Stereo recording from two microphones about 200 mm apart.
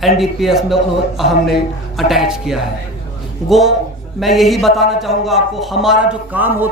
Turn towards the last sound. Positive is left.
turn(degrees=-10)  # may be behind; listen again after turning